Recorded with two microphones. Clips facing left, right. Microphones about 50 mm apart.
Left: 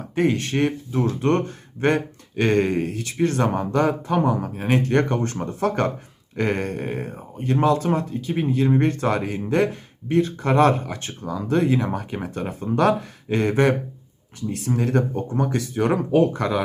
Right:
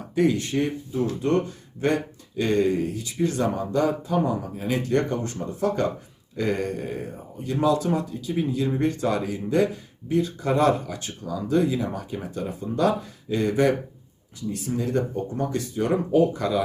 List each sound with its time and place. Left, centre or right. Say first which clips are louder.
0.2 s speech: left 2 dB; left
14.5 s speech: left 3 dB; left